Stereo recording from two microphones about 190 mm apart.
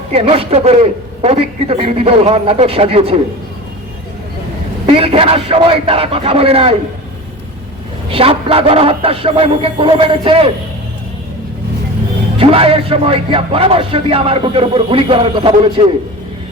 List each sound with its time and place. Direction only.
0.1 s a man's voice: 30° right (ahead or behind)
4.9 s speech: 30° right (ahead or behind)
8.1 s speech: 30° right (ahead or behind)
12.4 s speech: 30° right (ahead or behind)